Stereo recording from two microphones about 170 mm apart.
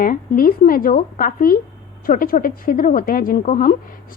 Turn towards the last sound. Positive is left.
turn(degrees=50)  # may be behind; listen again after turning